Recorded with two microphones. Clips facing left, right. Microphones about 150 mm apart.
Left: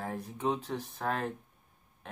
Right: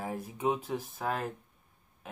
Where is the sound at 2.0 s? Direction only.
5° right (ahead or behind).